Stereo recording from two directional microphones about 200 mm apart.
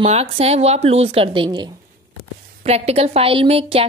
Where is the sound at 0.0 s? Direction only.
30° right (ahead or behind).